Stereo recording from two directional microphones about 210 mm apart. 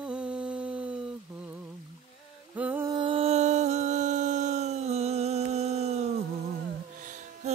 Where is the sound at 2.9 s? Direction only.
25° right (ahead or behind).